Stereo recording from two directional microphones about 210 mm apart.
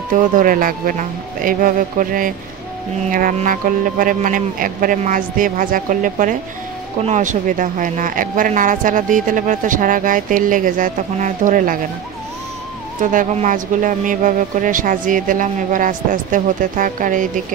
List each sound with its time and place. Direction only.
0.1 s speech: 40° right (ahead or behind)
13.0 s speech: 40° right (ahead or behind)